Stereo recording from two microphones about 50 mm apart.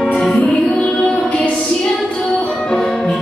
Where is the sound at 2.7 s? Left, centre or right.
Centre.